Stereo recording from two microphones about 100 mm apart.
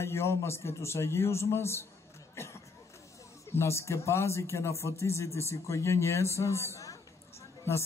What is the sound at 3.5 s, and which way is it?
A man's voice, 25° left (ahead or behind).